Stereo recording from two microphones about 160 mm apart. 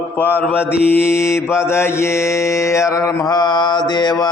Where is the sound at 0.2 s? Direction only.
10° left (ahead or behind).